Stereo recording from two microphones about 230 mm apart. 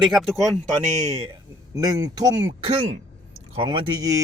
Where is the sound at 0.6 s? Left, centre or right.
Right.